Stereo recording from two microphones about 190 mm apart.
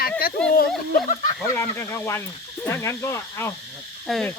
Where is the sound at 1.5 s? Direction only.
15° left (ahead or behind).